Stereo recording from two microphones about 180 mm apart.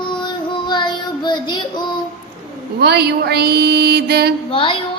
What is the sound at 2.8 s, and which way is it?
Music, 65° right (ahead or behind).